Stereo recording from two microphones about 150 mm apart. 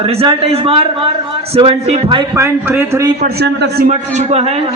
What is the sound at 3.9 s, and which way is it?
Speech, 50° right (ahead or behind).